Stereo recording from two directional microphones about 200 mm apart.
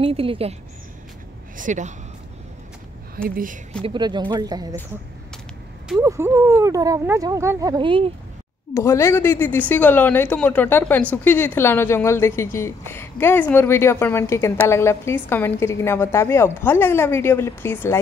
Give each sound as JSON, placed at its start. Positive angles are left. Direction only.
{"t": 0.0, "sound": "speech", "side_deg": -30}
{"t": 1.6, "sound": "speech", "side_deg": -35}
{"t": 3.2, "sound": "speech", "side_deg": -45}
{"t": 3.8, "sound": "speech", "side_deg": -25}
{"t": 5.9, "sound": "speech", "side_deg": -15}
{"t": 8.7, "sound": "a woman's voice", "side_deg": 15}